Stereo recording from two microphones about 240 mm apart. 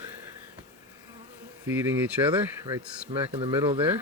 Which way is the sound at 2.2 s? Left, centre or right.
Centre.